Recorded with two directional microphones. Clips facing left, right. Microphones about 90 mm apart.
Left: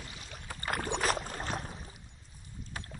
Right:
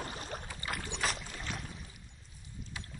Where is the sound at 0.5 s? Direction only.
50° left (ahead or behind).